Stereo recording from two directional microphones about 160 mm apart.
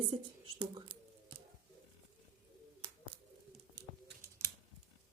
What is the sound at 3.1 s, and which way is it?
Bird, 30° right (ahead or behind).